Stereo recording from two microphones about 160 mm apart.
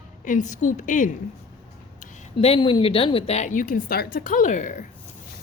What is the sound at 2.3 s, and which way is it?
A woman's voice, 35° left (ahead or behind).